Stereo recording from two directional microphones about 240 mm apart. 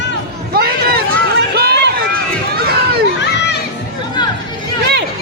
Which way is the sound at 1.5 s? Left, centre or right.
Right.